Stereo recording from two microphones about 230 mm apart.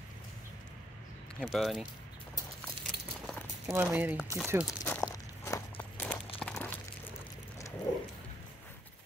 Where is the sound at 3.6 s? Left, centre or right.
Centre.